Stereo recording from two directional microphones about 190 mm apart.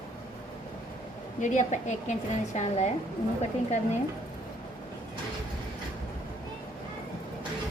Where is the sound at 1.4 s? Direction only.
40° left (ahead or behind).